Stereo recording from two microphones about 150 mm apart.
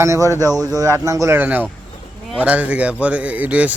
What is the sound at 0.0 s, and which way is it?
A man's voice, 20° right (ahead or behind).